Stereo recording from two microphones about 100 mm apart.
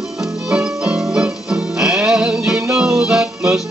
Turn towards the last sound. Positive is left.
turn(degrees=-5)  # may be behind; listen again after turning